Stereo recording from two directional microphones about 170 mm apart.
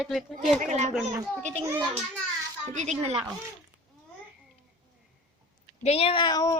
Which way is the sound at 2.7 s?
45° right (ahead or behind).